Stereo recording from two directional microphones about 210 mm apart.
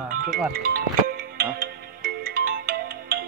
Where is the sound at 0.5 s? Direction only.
45° right (ahead or behind).